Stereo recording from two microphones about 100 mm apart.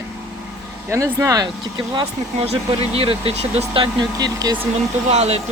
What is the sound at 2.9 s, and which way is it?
Speech, 70° right (ahead or behind).